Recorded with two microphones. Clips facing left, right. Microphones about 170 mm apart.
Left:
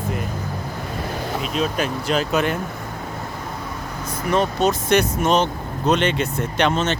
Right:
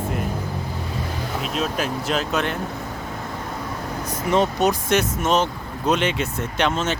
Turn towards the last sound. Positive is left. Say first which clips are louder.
# left 2 dB
turn(degrees=-5)  # may be behind; listen again after turning